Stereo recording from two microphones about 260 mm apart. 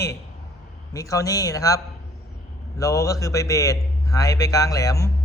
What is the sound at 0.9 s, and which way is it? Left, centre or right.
A man's voice, centre.